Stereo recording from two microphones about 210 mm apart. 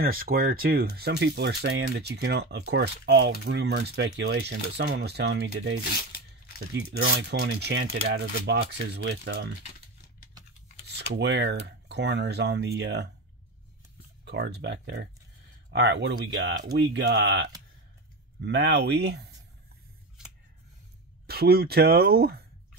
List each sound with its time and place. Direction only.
0.0 s speech: 45° right (ahead or behind)
11.0 s speech: 55° right (ahead or behind)
14.2 s speech: 55° right (ahead or behind)
21.3 s speech: 45° right (ahead or behind)